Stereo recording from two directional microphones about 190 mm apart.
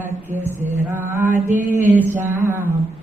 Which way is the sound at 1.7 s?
10° right (ahead or behind).